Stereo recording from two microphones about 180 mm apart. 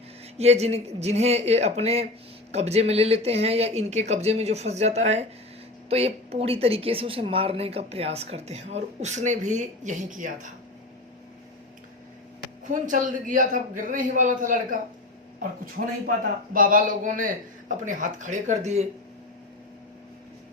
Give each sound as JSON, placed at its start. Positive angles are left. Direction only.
{"t": 0.3, "sound": "a woman's voice", "side_deg": -35}
{"t": 12.6, "sound": "a man's voice", "side_deg": -45}
{"t": 16.0, "sound": "a man's voice", "side_deg": -50}